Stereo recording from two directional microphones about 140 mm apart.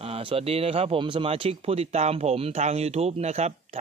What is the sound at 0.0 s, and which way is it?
Speech, 40° right (ahead or behind).